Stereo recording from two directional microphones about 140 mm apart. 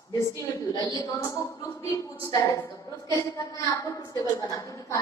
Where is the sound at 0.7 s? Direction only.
30° left (ahead or behind).